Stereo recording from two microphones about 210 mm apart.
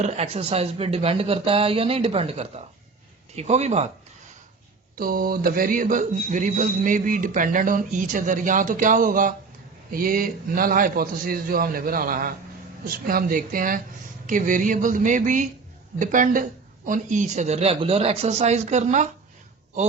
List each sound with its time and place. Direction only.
0.0 s speech: 30° right (ahead or behind)
4.9 s a man's voice: 45° right (ahead or behind)